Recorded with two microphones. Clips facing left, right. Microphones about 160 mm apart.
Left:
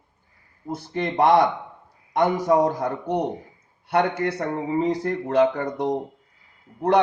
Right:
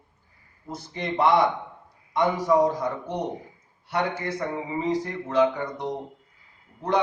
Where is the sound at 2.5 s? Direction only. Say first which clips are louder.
Left 1 dB; 50° left (ahead or behind).